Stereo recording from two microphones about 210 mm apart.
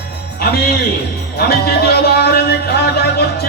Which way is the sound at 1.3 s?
50° left (ahead or behind).